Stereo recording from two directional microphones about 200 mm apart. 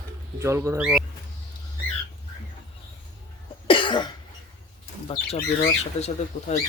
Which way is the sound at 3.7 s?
25° left (ahead or behind).